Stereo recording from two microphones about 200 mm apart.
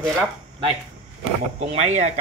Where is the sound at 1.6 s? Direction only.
35° right (ahead or behind).